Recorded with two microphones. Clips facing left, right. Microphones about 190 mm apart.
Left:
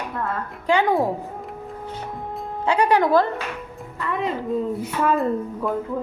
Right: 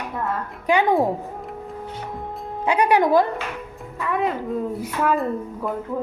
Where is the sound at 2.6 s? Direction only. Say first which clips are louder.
Right 1 dB; 15° right (ahead or behind).